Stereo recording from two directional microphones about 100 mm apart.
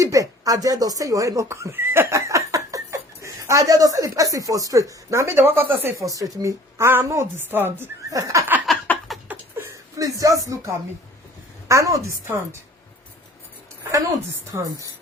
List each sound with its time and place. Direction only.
0.0 s speech: 35° right (ahead or behind)
6.1 s a woman's voice: 35° right (ahead or behind)
8.1 s speech: 30° right (ahead or behind)
8.7 s a sound: centre (ahead or behind)
9.3 s a sound: 25° right (ahead or behind)
10.0 s speech: 35° right (ahead or behind)
11.7 s speech: 30° right (ahead or behind)
14.5 s a woman's voice: 30° right (ahead or behind)